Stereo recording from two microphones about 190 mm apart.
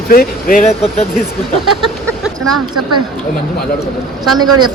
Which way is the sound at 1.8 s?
Centre (ahead or behind).